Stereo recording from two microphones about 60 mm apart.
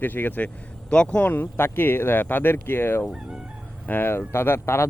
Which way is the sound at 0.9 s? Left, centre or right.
Centre.